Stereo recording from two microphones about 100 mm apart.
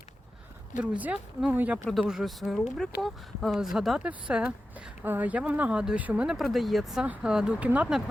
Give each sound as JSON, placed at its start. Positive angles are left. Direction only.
{"t": 0.8, "sound": "speech", "side_deg": -15}
{"t": 1.9, "sound": "speech", "side_deg": 0}